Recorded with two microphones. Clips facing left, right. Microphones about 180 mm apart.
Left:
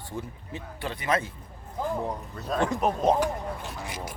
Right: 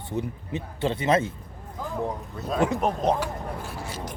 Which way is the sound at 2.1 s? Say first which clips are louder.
Right 1 dB; centre (ahead or behind).